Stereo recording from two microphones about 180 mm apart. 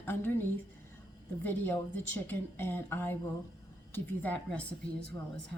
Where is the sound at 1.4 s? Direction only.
10° left (ahead or behind).